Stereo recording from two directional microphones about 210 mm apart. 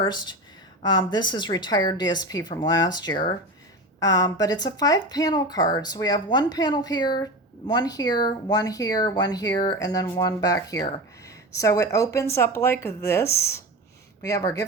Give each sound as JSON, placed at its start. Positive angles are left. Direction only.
{"t": 0.0, "sound": "speech", "side_deg": 20}